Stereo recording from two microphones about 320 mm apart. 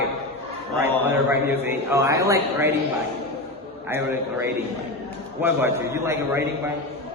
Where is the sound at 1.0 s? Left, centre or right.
Centre.